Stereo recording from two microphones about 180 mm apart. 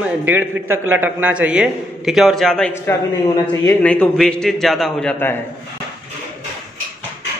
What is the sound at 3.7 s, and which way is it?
A man's voice, 5° left (ahead or behind).